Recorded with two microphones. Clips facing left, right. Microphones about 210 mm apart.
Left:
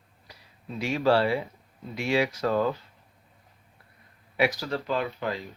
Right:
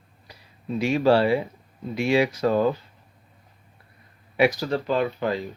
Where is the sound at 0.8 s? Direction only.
15° right (ahead or behind).